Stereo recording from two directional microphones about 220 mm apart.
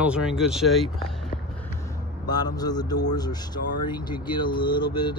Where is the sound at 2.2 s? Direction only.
20° left (ahead or behind).